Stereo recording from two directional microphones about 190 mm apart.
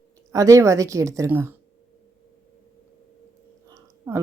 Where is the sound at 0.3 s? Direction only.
15° right (ahead or behind).